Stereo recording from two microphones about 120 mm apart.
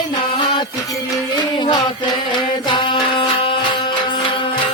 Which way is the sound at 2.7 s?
40° left (ahead or behind).